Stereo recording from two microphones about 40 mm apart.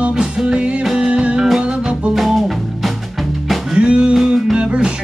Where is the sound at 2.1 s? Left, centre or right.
Centre.